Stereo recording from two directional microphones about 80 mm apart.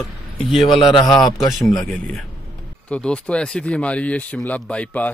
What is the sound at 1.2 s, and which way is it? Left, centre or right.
Speech, centre.